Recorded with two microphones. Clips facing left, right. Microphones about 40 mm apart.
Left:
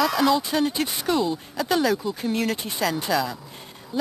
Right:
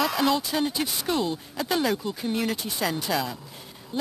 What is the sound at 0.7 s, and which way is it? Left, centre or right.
Speech, centre.